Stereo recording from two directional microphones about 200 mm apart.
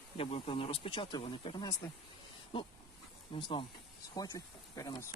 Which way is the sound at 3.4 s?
25° left (ahead or behind).